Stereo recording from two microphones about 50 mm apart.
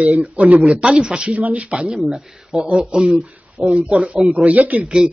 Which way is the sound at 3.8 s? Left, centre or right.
Right.